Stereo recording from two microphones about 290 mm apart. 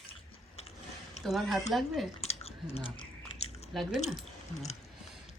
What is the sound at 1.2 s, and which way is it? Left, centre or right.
Speech, centre.